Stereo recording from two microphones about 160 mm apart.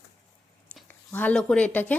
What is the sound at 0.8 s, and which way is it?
Speech, 10° left (ahead or behind).